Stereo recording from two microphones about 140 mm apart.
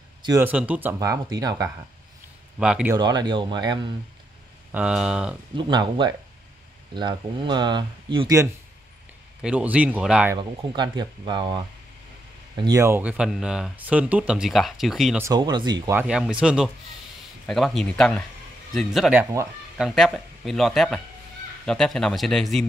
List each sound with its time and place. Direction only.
0.4 s speech: 10° right (ahead or behind)
0.9 s speech: 25° right (ahead or behind)
2.6 s speech: 5° right (ahead or behind)
2.9 s speech: 30° right (ahead or behind)
4.7 s speech: 5° right (ahead or behind)
5.6 s speech: 30° right (ahead or behind)
9.4 s speech: 10° right (ahead or behind)
10.3 s speech: 30° right (ahead or behind)
12.8 s speech: 15° right (ahead or behind)
15.3 s speech: 30° right (ahead or behind)
15.9 s speech: 10° right (ahead or behind)
19.4 s speech: 20° right (ahead or behind)
19.8 s speech: centre (ahead or behind)